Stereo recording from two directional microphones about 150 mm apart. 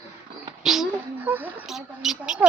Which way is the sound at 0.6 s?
Centre (ahead or behind).